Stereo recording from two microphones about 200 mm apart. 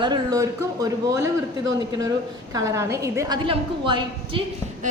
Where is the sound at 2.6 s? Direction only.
15° right (ahead or behind).